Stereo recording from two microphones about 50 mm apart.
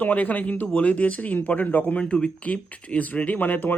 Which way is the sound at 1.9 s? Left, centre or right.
Left.